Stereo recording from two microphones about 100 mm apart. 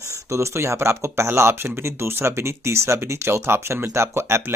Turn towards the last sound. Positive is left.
turn(degrees=-25)  # may be behind; listen again after turning